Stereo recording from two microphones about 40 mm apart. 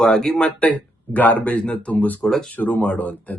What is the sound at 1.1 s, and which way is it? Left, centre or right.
Speech, left.